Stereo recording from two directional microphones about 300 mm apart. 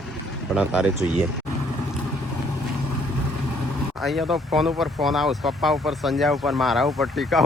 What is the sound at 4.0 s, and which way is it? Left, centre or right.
Speech, centre.